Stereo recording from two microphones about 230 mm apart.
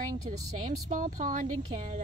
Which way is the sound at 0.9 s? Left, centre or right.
Right.